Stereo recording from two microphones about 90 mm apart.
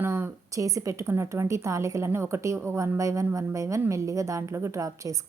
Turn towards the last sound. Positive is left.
turn(degrees=-35)  # may be behind; listen again after turning